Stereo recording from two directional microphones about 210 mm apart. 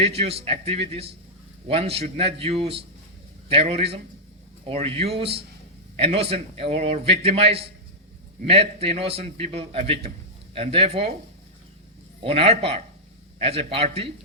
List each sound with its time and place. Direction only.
0.0 s a man's voice: 30° right (ahead or behind)
12.2 s a man's voice: 30° right (ahead or behind)